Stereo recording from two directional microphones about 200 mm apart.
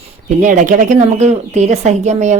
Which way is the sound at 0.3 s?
40° right (ahead or behind).